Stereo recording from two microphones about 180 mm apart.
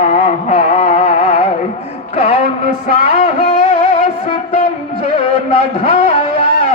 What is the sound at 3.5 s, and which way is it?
Music, 45° left (ahead or behind).